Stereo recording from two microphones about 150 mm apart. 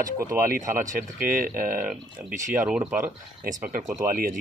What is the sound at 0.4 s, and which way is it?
Speech, 65° right (ahead or behind).